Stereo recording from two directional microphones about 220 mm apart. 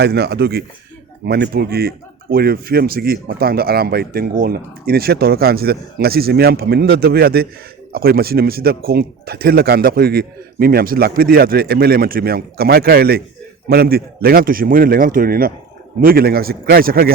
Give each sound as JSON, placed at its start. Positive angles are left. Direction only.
{"t": 0.0, "sound": "a man's voice", "side_deg": -50}